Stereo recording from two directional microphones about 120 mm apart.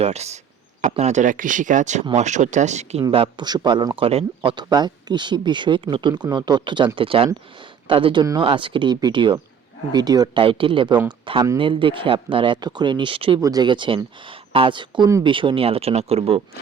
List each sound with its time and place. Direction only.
0.0 s speech: 65° right (ahead or behind)
3.1 s speech: 50° right (ahead or behind)
3.4 s speech: 35° right (ahead or behind); by 4.3 s 55° right (ahead or behind)
4.4 s speech: 35° right (ahead or behind)
10.4 s speech: 45° right (ahead or behind)
13.4 s speech: 35° right (ahead or behind); by 16.4 s 55° right (ahead or behind)